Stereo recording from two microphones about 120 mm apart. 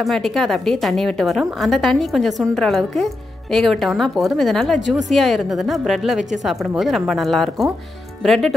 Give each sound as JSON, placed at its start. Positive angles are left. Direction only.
{"t": 0.0, "sound": "a woman's voice", "side_deg": 0}